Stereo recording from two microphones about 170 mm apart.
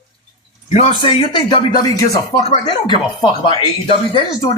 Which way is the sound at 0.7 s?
40° left (ahead or behind).